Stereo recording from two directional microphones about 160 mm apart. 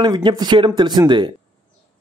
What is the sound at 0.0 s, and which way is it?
A man's voice, 30° right (ahead or behind).